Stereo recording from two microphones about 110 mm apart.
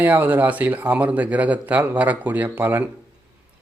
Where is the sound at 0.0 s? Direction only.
15° right (ahead or behind).